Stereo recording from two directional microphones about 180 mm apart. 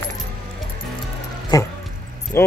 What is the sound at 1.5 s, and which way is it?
Speech, 20° left (ahead or behind).